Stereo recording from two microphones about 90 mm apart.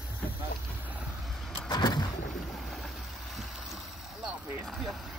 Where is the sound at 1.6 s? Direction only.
55° left (ahead or behind).